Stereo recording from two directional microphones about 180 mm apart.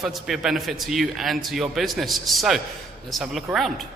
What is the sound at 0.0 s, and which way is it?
A man's voice, centre (ahead or behind).